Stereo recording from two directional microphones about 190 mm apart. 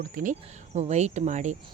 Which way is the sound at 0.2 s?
40° right (ahead or behind).